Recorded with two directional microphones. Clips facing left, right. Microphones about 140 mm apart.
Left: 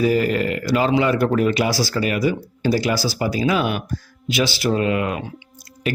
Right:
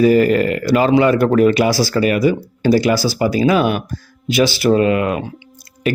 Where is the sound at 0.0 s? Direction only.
55° right (ahead or behind).